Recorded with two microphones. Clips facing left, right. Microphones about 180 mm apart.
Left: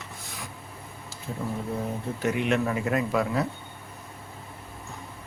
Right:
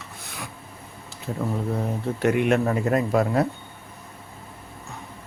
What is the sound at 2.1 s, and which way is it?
Speech, 60° right (ahead or behind).